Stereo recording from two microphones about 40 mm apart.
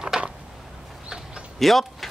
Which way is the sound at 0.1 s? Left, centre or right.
Centre.